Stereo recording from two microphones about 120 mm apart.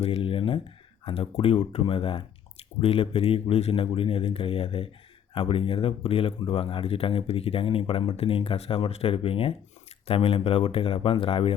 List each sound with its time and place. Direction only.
0.0 s speech: 50° left (ahead or behind)